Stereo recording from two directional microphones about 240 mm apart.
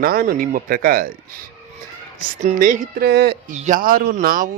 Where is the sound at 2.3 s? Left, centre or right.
Right.